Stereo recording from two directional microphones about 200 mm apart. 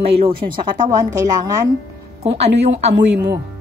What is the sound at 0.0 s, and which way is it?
Speech, 30° right (ahead or behind).